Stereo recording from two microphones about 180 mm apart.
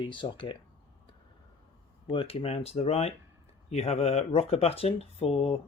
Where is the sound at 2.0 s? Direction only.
30° left (ahead or behind).